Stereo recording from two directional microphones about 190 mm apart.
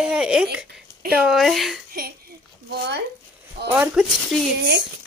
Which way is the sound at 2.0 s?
50° right (ahead or behind).